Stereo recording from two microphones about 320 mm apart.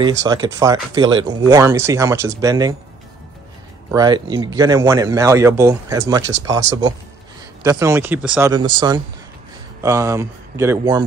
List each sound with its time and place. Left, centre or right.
0.0 s a man's voice: centre
3.9 s a man's voice: centre